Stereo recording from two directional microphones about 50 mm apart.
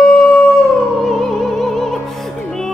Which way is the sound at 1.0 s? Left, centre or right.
Centre.